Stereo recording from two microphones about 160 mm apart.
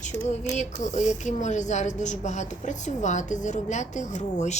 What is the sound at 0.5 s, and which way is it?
Speech, 50° left (ahead or behind).